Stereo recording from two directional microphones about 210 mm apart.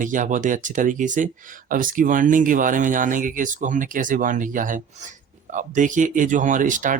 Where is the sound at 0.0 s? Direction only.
40° right (ahead or behind).